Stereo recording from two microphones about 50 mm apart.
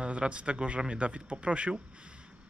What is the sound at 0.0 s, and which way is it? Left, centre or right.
Speech, right.